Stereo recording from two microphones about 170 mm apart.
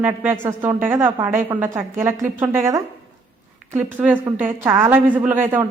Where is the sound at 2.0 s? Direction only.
15° right (ahead or behind).